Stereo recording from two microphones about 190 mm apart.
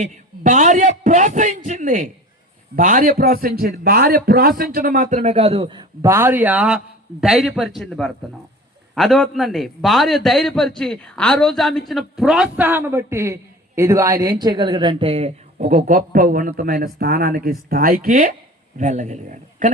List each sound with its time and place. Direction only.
0.0 s a man's voice: 40° right (ahead or behind)
6.0 s a man's voice: 15° right (ahead or behind); by 19.7 s 40° right (ahead or behind)